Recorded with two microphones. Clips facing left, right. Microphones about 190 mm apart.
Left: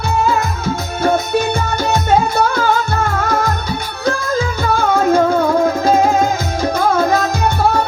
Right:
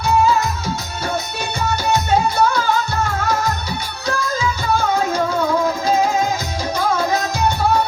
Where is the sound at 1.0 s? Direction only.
55° left (ahead or behind).